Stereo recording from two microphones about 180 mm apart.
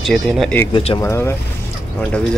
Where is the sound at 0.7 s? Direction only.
30° left (ahead or behind).